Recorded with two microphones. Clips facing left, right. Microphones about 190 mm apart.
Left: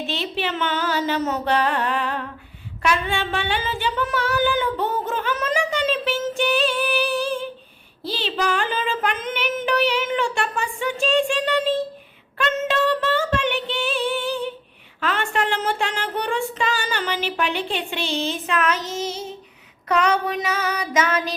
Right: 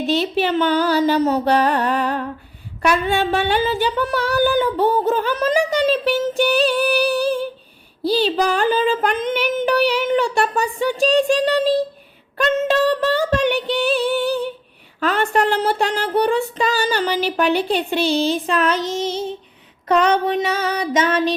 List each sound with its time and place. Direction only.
0.1 s female singing: 40° right (ahead or behind)